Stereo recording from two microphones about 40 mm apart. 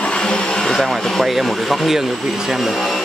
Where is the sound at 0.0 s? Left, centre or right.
Left.